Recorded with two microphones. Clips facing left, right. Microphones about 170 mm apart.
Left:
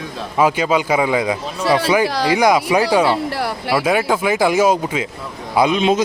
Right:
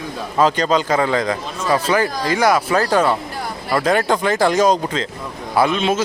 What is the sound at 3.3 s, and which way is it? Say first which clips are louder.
Speech: left 6 dB; 75° left (ahead or behind).